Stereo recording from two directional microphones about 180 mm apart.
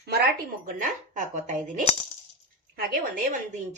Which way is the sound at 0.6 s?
45° right (ahead or behind).